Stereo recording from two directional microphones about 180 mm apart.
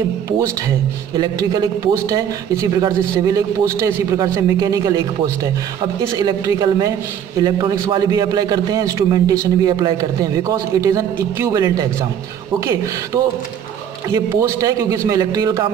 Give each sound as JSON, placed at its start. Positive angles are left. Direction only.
{"t": 1.1, "sound": "a man's voice", "side_deg": -20}